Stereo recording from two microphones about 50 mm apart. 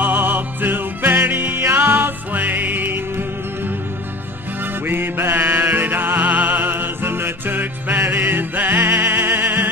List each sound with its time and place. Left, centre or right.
0.0 s music: right
4.8 s music: right